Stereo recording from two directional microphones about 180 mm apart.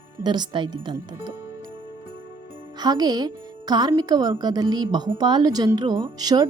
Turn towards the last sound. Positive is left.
turn(degrees=-25)  # may be behind; listen again after turning